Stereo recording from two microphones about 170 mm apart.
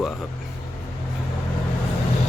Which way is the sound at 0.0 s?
Centre (ahead or behind).